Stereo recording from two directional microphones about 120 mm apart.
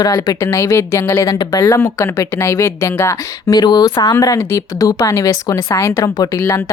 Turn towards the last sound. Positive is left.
turn(degrees=25)  # may be behind; listen again after turning